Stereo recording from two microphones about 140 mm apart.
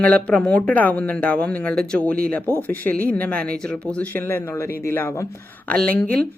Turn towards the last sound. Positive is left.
turn(degrees=10)  # may be behind; listen again after turning